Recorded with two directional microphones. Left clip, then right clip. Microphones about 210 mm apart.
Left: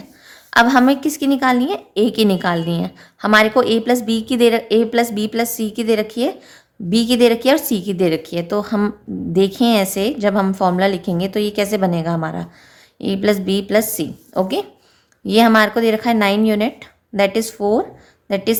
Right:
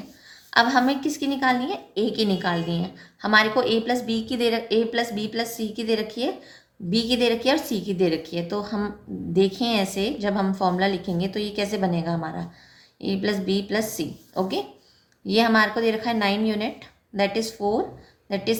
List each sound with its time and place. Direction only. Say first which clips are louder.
0.5 s a woman's voice: left 7 dB; 50° left (ahead or behind)